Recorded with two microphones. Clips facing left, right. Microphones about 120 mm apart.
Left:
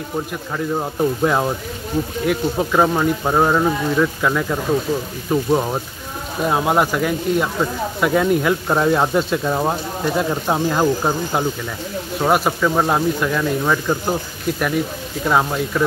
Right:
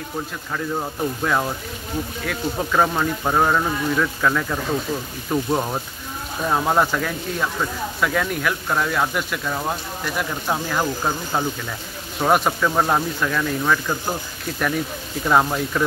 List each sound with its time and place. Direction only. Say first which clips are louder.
0.7 s speech: left 8 dB; 20° left (ahead or behind)
12.2 s speech: left 1 dB; 5° left (ahead or behind)
15.2 s speech: even; centre (ahead or behind)